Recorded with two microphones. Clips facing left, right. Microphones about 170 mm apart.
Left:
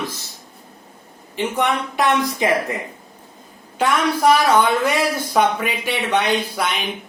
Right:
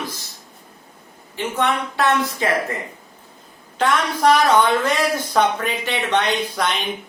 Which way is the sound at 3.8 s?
10° left (ahead or behind).